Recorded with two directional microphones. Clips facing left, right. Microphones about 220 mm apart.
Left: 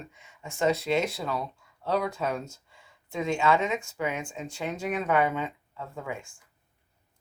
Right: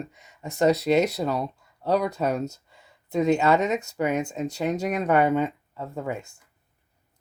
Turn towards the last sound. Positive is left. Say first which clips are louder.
# right 6 dB
turn(degrees=-40)  # may be behind; listen again after turning